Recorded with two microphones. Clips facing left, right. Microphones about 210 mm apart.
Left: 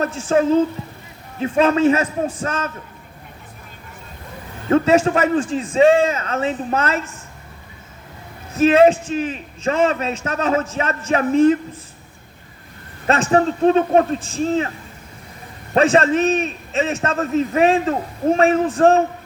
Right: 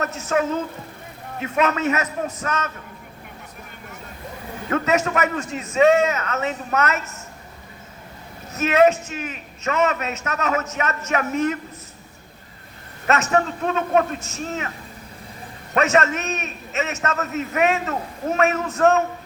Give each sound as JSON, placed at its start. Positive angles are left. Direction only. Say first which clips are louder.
{"t": 0.0, "sound": "a man's voice", "louder": "left 5 dB", "side_deg": 30}
{"t": 4.7, "sound": "a man's voice", "louder": "left 6 dB", "side_deg": 30}
{"t": 8.5, "sound": "a man's voice", "louder": "left 4 dB", "side_deg": 30}
{"t": 13.1, "sound": "a man's voice", "louder": "left 4 dB", "side_deg": 30}
{"t": 15.7, "sound": "a man's voice", "louder": "left 5 dB", "side_deg": 30}